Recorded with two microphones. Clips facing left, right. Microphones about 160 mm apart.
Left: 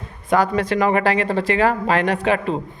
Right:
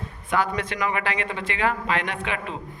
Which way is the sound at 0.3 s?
40° left (ahead or behind).